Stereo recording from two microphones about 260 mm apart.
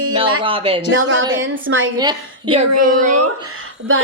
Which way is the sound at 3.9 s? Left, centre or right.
Right.